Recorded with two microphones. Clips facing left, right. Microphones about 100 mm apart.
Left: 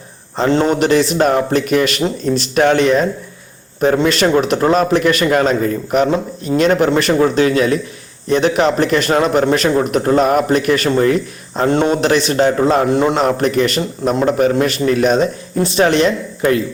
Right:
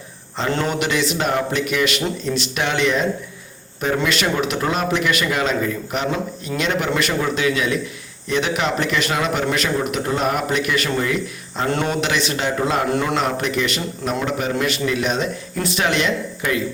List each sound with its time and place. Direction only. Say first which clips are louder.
0.3 s a man's voice: left 8 dB; 35° left (ahead or behind)
12.9 s a man's voice: left 7 dB; 25° left (ahead or behind)
13.1 s a man's voice: left 7 dB; 40° left (ahead or behind)